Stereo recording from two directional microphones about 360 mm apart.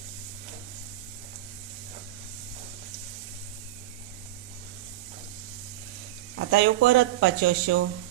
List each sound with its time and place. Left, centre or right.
6.3 s speech: right